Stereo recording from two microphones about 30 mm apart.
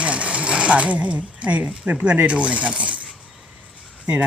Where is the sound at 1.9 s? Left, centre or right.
Right.